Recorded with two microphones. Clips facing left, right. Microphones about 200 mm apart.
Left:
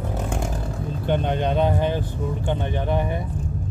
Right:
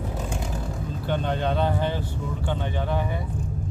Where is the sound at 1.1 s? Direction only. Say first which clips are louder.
Left 3 dB; 20° left (ahead or behind).